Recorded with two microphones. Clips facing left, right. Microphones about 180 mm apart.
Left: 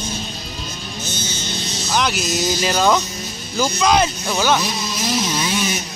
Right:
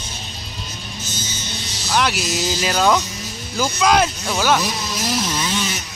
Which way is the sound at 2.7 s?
5° left (ahead or behind).